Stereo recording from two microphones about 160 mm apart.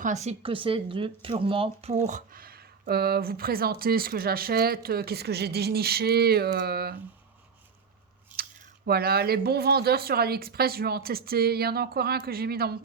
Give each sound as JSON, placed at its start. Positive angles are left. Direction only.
{"t": 0.0, "sound": "speech", "side_deg": -45}
{"t": 8.9, "sound": "speech", "side_deg": -75}